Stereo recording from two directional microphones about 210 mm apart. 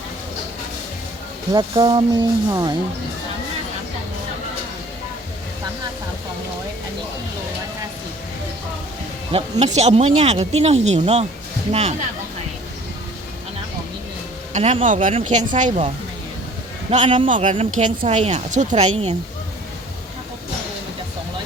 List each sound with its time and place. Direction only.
1.5 s speech: 20° right (ahead or behind)
9.3 s speech: 30° right (ahead or behind)
14.5 s speech: 30° right (ahead or behind)
16.9 s speech: 35° right (ahead or behind)